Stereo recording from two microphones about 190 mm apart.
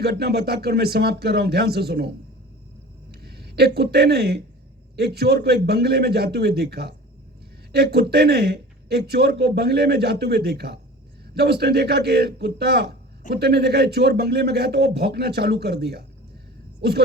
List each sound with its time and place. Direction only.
0.0 s speech: 60° right (ahead or behind)